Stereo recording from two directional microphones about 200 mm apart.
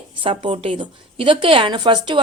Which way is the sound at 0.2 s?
25° right (ahead or behind).